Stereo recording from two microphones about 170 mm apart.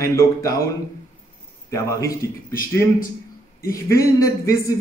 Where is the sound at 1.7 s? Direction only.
20° left (ahead or behind).